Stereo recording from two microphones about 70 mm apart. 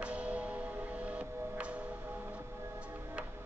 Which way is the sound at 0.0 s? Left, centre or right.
Centre.